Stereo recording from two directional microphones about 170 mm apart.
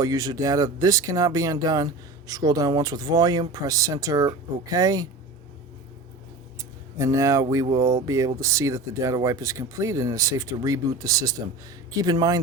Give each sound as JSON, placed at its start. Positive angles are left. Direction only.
{"t": 0.0, "sound": "speech", "side_deg": -20}
{"t": 6.6, "sound": "a sound", "side_deg": -20}
{"t": 7.5, "sound": "speech", "side_deg": -20}